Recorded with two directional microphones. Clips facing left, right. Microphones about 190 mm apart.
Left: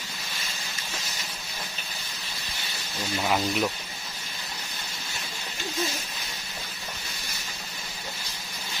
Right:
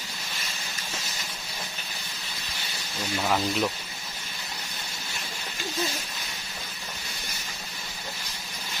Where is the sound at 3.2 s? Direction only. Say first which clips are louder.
Even; 5° left (ahead or behind).